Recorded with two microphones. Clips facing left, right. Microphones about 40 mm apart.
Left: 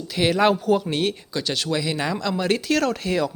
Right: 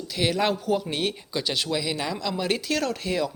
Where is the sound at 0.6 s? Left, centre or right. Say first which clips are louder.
Left 5 dB; centre.